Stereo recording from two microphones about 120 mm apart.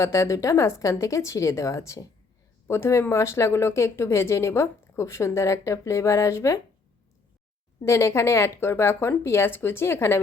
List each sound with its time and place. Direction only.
0.0 s speech: 25° left (ahead or behind)
7.8 s speech: 25° left (ahead or behind)